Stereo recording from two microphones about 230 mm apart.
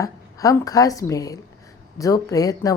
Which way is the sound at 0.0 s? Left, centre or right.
Centre.